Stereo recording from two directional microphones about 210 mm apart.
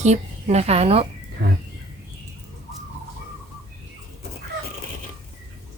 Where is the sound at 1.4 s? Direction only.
55° right (ahead or behind).